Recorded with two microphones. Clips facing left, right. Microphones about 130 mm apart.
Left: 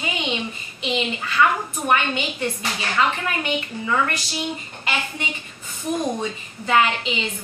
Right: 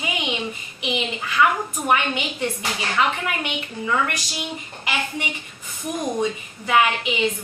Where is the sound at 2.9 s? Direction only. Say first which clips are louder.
Left 1 dB; 15° right (ahead or behind).